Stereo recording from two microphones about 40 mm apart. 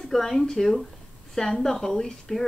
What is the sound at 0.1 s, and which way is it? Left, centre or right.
A woman's voice, centre.